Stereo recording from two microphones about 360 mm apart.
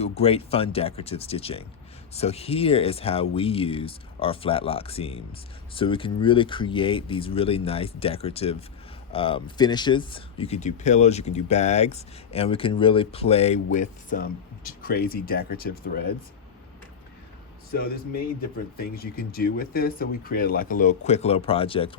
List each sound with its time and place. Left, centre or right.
0.0 s speech: centre
17.7 s speech: left